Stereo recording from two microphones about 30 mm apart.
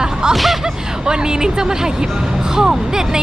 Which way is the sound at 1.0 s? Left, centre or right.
Right.